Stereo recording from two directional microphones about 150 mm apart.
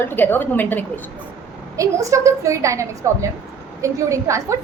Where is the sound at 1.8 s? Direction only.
20° right (ahead or behind).